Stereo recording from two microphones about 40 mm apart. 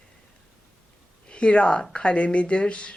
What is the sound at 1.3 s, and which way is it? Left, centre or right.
Speech, left.